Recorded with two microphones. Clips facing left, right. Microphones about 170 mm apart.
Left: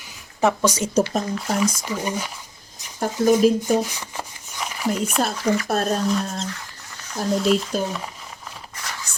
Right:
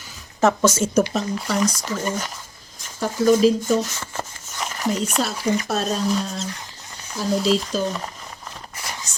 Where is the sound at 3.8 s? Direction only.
15° left (ahead or behind).